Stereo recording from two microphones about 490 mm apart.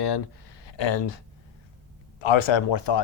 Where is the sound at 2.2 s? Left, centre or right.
Left.